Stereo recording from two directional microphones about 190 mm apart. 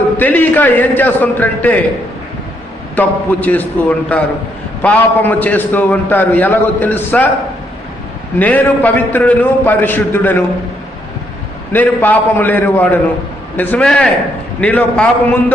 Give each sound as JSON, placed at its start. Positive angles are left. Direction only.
{"t": 0.2, "sound": "a man's voice", "side_deg": 10}
{"t": 2.9, "sound": "a man's voice", "side_deg": 10}
{"t": 8.4, "sound": "a man's voice", "side_deg": 10}
{"t": 11.7, "sound": "a man's voice", "side_deg": 10}